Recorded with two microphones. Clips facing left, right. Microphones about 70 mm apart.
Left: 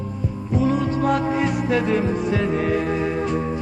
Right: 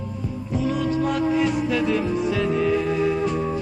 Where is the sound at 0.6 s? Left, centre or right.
Left.